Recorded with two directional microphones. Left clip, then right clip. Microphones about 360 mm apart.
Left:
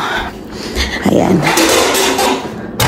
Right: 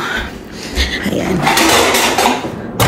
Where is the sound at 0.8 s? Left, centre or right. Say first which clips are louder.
Left 4 dB; centre.